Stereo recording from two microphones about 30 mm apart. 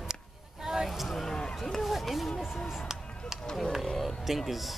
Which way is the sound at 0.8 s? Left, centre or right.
Centre.